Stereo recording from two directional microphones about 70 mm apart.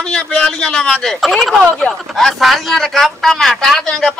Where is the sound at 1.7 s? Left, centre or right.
Centre.